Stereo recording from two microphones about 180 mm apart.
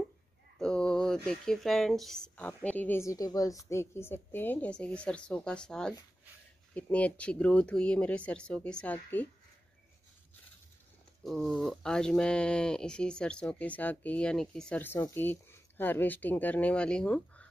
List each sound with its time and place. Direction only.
0.6 s speech: 5° left (ahead or behind)
11.2 s speech: 5° left (ahead or behind)